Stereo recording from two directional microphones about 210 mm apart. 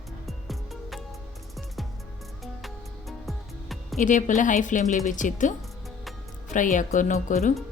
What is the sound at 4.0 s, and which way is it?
A woman's voice, 35° left (ahead or behind).